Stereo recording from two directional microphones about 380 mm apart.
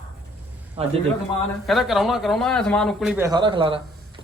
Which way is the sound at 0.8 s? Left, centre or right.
Centre.